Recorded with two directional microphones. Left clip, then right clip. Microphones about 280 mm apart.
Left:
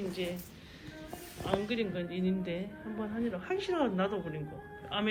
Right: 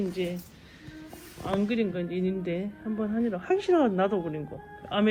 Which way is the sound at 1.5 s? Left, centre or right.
Right.